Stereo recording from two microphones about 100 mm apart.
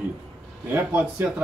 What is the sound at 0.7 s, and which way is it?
Speech, 15° right (ahead or behind).